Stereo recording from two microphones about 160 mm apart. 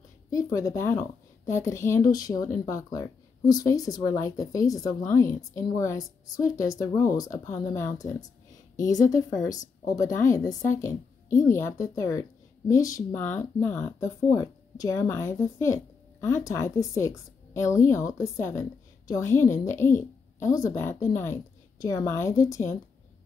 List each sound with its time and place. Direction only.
0.3 s a woman's voice: 20° left (ahead or behind)
9.0 s a woman's voice: 55° left (ahead or behind)
10.8 s a woman's voice: 20° left (ahead or behind)